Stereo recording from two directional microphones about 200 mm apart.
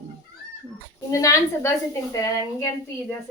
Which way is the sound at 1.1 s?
15° left (ahead or behind).